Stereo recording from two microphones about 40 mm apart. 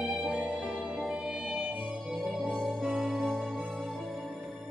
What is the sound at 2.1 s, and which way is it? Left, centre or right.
Music, centre.